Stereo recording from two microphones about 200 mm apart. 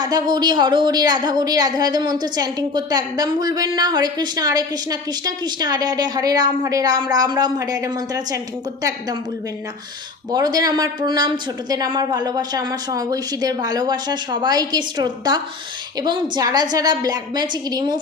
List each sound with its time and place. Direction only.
0.0 s a woman's voice: 20° right (ahead or behind)
10.3 s a woman's voice: 20° right (ahead or behind)